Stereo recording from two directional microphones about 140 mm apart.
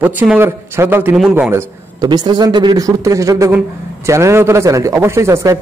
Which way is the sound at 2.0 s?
30° right (ahead or behind).